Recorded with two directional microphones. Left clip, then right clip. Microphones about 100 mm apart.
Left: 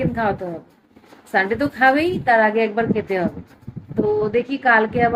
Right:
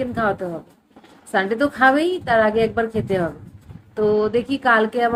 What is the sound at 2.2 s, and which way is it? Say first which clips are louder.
Speech: left 2 dB; 30° right (ahead or behind).